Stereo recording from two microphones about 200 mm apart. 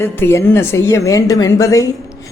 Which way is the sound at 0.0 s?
15° left (ahead or behind).